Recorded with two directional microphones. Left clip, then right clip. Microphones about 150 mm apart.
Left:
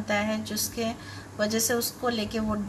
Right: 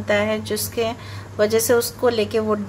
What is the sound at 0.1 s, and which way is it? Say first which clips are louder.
A woman's voice: right 8 dB; 35° right (ahead or behind).